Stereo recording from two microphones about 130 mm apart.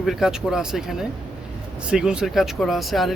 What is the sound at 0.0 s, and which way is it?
Speech, 5° right (ahead or behind).